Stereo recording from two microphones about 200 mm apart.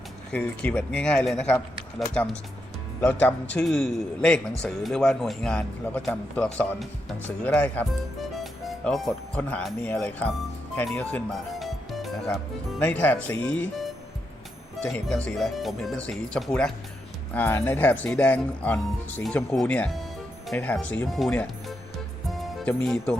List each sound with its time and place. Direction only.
0.3 s a man's voice: 5° left (ahead or behind)
22.3 s music: centre (ahead or behind)